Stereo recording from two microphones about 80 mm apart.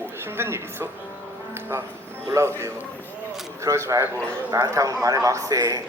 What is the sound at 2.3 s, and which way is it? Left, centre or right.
Speech, right.